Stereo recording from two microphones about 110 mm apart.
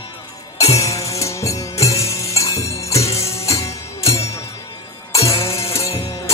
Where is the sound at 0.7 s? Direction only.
30° left (ahead or behind).